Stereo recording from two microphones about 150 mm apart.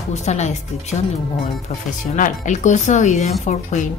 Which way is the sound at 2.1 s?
55° left (ahead or behind).